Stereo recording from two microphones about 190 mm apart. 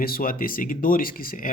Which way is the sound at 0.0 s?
50° left (ahead or behind).